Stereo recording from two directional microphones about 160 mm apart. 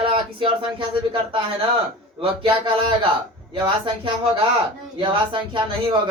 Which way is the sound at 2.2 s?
30° right (ahead or behind).